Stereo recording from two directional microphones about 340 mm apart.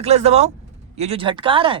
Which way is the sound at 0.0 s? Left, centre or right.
Centre.